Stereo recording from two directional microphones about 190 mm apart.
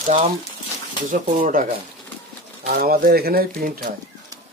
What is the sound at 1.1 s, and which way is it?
Speech, 45° right (ahead or behind).